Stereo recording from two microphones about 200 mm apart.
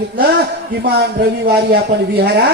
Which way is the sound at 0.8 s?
55° right (ahead or behind).